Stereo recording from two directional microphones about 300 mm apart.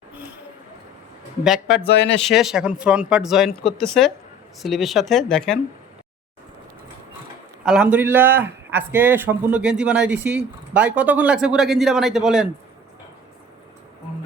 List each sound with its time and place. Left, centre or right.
0.1 s a sound: centre
1.6 s speech: left
2.2 s a man's voice: centre
7.6 s a man's voice: centre